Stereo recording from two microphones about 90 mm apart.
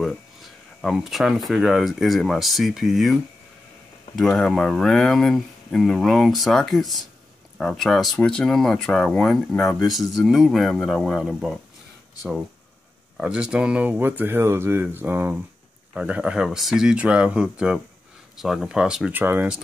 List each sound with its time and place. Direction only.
0.7 s speech: centre (ahead or behind)
13.2 s speech: 10° right (ahead or behind)
15.9 s speech: 10° right (ahead or behind)
19.1 s speech: 20° right (ahead or behind)